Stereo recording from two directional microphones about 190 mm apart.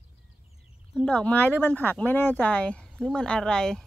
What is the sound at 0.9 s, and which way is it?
Speech, 5° left (ahead or behind).